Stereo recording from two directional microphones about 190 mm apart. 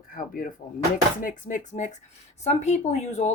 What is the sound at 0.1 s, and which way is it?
Speech, 45° left (ahead or behind).